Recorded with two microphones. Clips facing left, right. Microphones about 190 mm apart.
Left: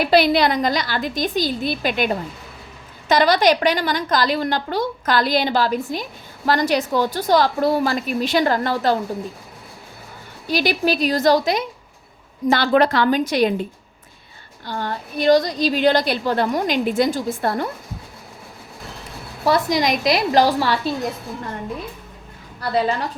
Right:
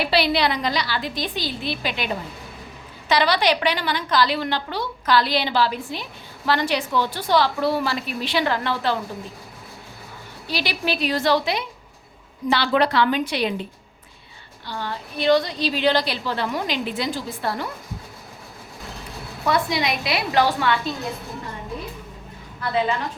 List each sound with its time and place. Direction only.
0.0 s a woman's voice: 45° left (ahead or behind)
3.1 s a woman's voice: 45° left (ahead or behind)
10.5 s a woman's voice: 45° left (ahead or behind)
14.7 s a woman's voice: 50° left (ahead or behind)
19.5 s a woman's voice: 40° left (ahead or behind)
22.7 s a woman's voice: 40° left (ahead or behind)